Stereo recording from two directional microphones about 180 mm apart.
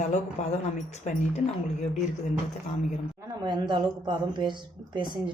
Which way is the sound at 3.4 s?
25° right (ahead or behind).